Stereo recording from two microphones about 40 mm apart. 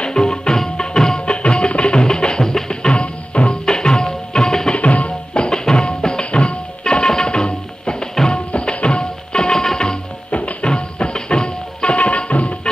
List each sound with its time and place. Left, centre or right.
0.0 s music: centre
4.7 s music: left; by 9.9 s centre
10.3 s music: left